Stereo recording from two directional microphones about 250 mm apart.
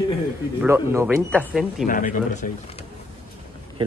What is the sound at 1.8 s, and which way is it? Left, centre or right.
Speech, left.